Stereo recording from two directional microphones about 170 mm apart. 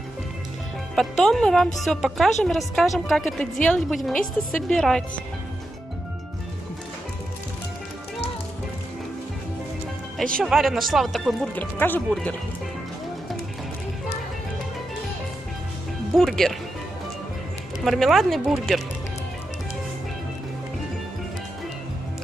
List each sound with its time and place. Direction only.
0.9 s a woman's voice: centre (ahead or behind)
10.3 s a woman's voice: centre (ahead or behind)
11.5 s speech: 10° left (ahead or behind)
16.2 s a woman's voice: centre (ahead or behind)
17.8 s a woman's voice: centre (ahead or behind)